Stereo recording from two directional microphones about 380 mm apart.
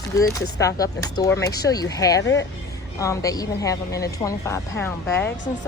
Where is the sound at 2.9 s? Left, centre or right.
Centre.